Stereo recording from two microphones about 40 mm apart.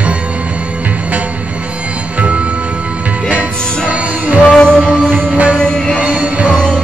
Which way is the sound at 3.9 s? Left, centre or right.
Right.